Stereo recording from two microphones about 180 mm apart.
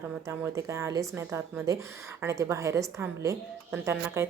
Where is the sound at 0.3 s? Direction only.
15° right (ahead or behind).